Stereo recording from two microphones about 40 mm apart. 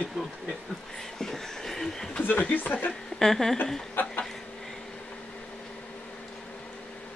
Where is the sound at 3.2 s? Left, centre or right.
Centre.